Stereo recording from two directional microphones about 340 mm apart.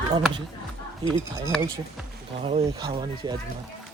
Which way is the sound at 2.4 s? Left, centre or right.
Centre.